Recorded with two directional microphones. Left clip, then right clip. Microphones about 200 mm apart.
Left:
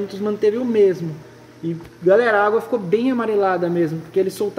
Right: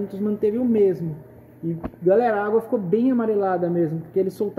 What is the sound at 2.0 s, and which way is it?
Speech, 50° right (ahead or behind).